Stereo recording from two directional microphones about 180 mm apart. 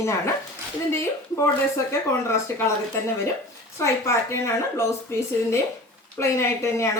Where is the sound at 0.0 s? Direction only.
15° left (ahead or behind).